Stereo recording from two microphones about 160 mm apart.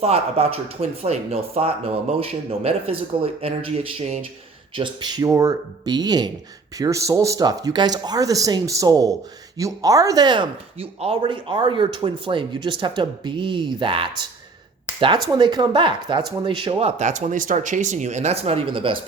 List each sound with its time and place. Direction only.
0.0 s speech: 40° right (ahead or behind)
4.7 s speech: 30° right (ahead or behind)